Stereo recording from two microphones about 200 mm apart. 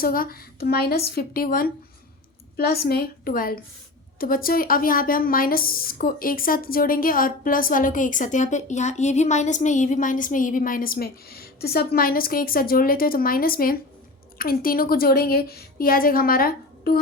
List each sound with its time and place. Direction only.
0.0 s a woman's voice: 45° left (ahead or behind)